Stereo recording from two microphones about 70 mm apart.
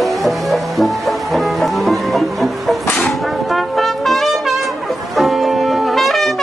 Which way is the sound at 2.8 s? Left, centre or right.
Left.